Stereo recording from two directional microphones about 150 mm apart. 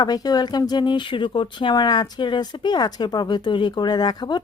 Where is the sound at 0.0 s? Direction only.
25° left (ahead or behind).